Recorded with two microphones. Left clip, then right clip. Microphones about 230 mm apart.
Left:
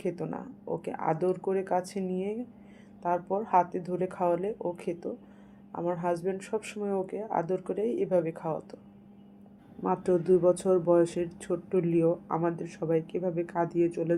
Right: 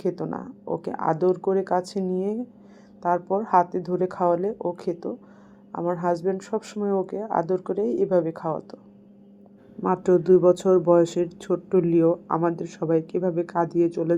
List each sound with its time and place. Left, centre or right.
0.0 s speech: centre
9.8 s speech: right